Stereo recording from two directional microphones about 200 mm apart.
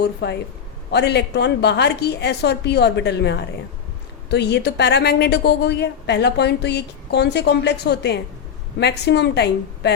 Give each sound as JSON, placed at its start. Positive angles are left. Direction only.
{"t": 0.0, "sound": "a woman's voice", "side_deg": 55}